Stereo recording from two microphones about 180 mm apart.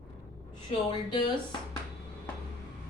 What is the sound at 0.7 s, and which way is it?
Speech, 25° left (ahead or behind).